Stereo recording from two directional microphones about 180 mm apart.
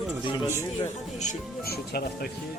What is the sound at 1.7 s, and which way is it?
Speech, 60° left (ahead or behind).